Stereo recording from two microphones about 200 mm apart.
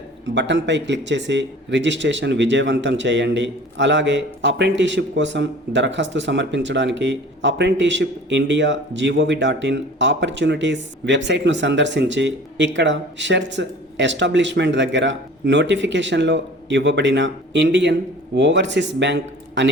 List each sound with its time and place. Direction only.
0.3 s speech: 60° right (ahead or behind)